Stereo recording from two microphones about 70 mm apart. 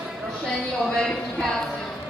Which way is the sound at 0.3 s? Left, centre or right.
Centre.